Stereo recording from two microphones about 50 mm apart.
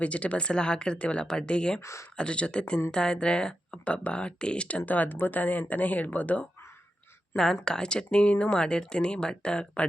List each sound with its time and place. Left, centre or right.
0.0 s speech: left
1.8 s speech: left
2.1 s speech: left
4.9 s speech: left
7.3 s speech: centre